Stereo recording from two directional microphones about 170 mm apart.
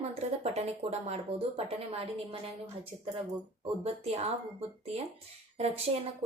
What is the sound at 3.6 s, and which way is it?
Speech, 40° right (ahead or behind).